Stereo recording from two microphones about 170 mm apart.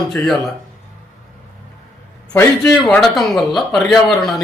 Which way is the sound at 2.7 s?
Centre (ahead or behind).